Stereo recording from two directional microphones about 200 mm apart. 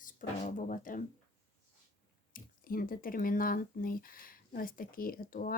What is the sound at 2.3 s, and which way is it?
Speech, 45° left (ahead or behind).